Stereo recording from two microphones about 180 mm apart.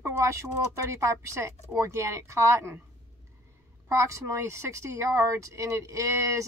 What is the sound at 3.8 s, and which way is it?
A woman's voice, 15° right (ahead or behind).